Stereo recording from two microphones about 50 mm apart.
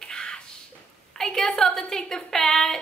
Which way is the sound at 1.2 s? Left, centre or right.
Centre.